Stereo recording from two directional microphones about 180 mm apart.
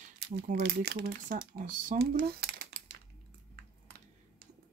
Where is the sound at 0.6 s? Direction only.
65° right (ahead or behind).